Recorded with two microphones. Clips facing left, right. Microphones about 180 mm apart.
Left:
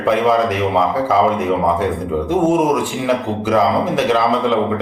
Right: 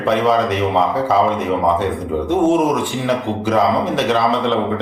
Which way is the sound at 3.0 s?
5° left (ahead or behind).